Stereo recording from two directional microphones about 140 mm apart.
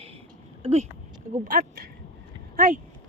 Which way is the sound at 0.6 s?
50° right (ahead or behind).